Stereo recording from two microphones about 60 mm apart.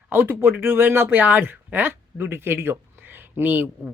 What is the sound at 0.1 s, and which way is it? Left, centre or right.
Speech, right.